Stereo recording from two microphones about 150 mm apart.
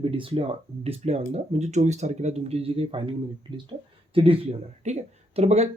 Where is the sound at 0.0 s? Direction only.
35° right (ahead or behind).